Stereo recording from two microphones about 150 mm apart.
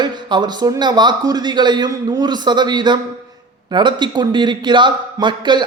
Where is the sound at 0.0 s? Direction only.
30° right (ahead or behind).